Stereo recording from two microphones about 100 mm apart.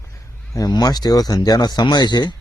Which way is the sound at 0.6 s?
45° left (ahead or behind).